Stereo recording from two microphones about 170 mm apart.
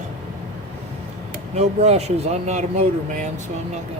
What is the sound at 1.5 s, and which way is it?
Speech, 40° right (ahead or behind).